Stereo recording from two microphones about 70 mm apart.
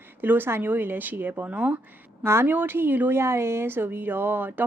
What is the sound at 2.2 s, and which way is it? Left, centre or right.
Speech, right.